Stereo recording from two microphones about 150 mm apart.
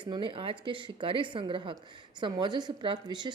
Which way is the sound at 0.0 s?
35° right (ahead or behind).